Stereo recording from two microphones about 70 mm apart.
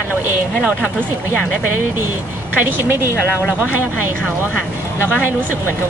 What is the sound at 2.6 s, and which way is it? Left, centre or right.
Speech, right.